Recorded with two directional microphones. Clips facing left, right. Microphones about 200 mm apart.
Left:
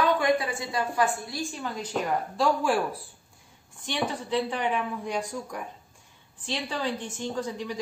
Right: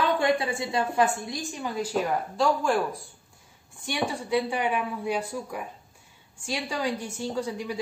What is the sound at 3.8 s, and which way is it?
A woman's voice, 10° right (ahead or behind).